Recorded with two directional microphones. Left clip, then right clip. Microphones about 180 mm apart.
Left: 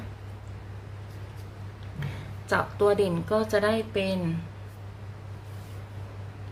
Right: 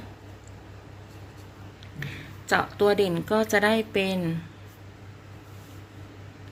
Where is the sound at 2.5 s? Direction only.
25° right (ahead or behind).